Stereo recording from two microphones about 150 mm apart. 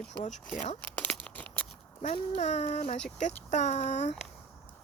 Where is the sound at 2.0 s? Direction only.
45° left (ahead or behind).